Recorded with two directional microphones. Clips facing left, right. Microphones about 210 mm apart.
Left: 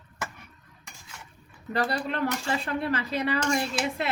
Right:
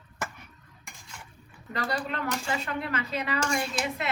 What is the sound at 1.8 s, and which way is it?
Speech, 30° left (ahead or behind).